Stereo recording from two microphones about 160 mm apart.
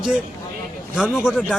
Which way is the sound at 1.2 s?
5° right (ahead or behind).